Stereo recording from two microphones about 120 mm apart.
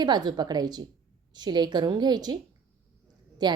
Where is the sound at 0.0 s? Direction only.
35° right (ahead or behind).